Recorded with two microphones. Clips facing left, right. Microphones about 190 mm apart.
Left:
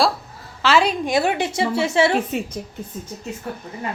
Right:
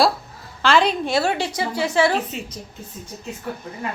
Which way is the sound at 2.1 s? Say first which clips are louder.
Left 3 dB; 55° left (ahead or behind).